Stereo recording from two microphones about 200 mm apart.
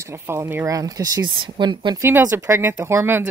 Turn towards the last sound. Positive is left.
turn(degrees=-10)  # may be behind; listen again after turning